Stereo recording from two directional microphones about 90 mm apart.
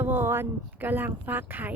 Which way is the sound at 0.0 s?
25° right (ahead or behind).